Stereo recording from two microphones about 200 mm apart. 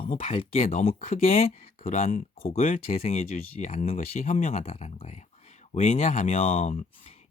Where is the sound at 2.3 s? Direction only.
30° left (ahead or behind).